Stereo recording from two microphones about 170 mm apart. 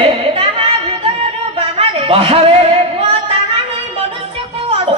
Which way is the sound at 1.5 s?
35° right (ahead or behind).